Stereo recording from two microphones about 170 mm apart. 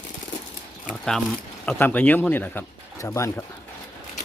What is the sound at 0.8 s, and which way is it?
Speech, centre (ahead or behind).